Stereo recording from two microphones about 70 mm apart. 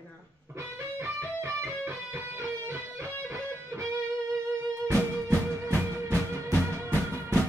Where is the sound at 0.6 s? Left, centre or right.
Right.